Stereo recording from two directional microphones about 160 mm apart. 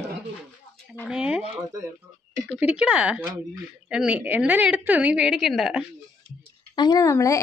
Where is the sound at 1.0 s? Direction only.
5° right (ahead or behind).